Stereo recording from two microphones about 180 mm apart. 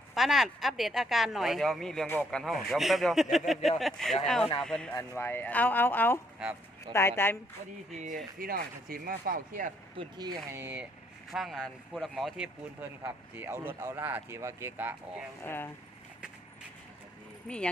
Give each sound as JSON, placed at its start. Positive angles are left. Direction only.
{"t": 0.1, "sound": "speech", "side_deg": 0}
{"t": 7.9, "sound": "speech", "side_deg": -50}
{"t": 10.0, "sound": "speech", "side_deg": -25}
{"t": 11.3, "sound": "speech", "side_deg": 0}
{"t": 13.0, "sound": "speech", "side_deg": -15}
{"t": 15.4, "sound": "speech", "side_deg": 10}
{"t": 17.5, "sound": "speech", "side_deg": 5}